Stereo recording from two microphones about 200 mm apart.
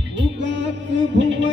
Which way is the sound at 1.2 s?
65° right (ahead or behind).